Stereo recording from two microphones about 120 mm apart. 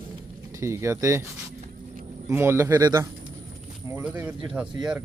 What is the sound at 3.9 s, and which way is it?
Speech, 15° right (ahead or behind).